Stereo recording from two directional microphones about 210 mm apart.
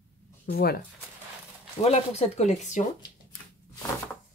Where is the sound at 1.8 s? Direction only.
30° left (ahead or behind).